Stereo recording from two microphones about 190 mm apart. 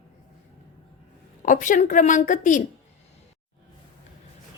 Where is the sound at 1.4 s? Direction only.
40° left (ahead or behind).